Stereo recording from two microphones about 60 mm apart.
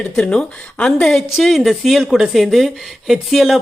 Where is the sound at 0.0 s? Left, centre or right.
Centre.